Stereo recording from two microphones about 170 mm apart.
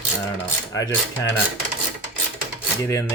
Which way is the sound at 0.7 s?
20° left (ahead or behind).